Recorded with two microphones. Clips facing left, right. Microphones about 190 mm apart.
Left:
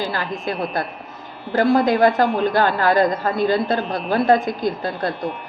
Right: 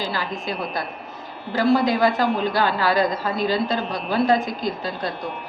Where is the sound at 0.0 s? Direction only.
50° left (ahead or behind).